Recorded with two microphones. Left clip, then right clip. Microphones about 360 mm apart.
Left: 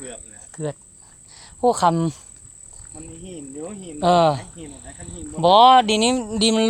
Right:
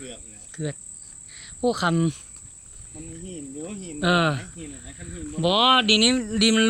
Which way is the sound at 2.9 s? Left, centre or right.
Left.